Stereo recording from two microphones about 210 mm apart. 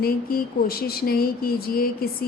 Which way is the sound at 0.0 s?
45° left (ahead or behind).